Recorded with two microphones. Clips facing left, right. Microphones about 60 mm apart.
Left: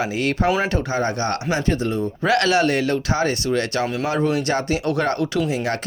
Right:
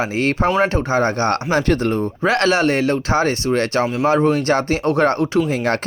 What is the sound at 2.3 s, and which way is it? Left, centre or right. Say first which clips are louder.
Speech: right 1 dB; right.